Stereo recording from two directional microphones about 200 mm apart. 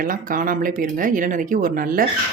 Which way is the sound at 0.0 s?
45° right (ahead or behind).